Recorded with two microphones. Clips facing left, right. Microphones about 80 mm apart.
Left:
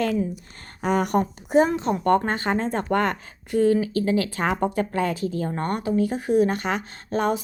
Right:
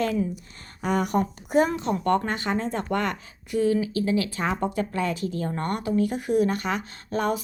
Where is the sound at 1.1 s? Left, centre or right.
Left.